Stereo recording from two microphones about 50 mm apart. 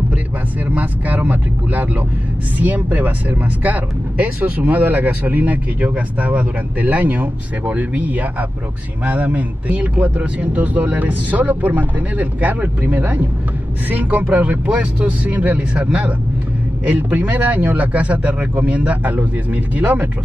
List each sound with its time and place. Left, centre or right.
0.7 s a man's voice: right